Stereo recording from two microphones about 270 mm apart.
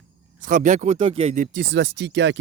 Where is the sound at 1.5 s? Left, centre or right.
Right.